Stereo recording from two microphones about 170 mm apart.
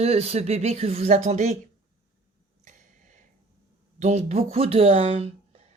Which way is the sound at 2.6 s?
50° right (ahead or behind).